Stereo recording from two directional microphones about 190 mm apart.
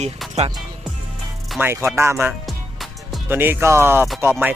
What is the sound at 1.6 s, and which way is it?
Speech, 15° right (ahead or behind).